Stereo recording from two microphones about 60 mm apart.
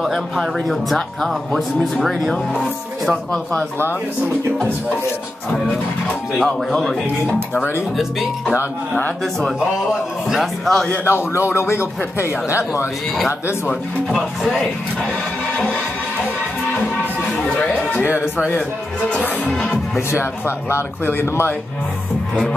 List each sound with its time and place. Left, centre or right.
0.4 s speech: centre
6.3 s speech: centre
10.2 s speech: centre
11.1 s speech: left
14.0 s speech: centre
15.5 s music: left
18.0 s a man's voice: centre
19.0 s music: left
20.1 s speech: left